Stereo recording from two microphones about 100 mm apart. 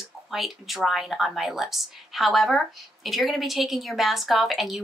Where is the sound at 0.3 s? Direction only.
Centre (ahead or behind).